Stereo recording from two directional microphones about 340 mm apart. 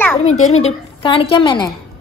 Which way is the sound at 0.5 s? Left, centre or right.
Centre.